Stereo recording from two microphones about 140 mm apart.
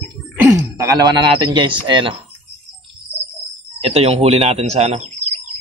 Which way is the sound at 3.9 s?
45° right (ahead or behind).